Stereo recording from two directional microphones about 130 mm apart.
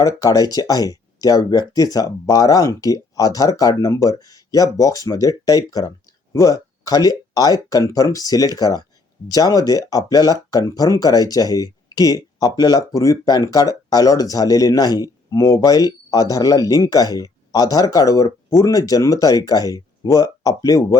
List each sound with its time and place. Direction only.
0.0 s speech: 30° left (ahead or behind)